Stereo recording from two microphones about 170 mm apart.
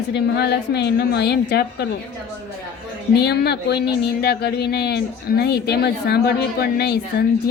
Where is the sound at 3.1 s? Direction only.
75° left (ahead or behind).